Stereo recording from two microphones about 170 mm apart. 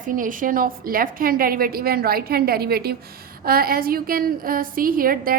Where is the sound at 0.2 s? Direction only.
50° right (ahead or behind).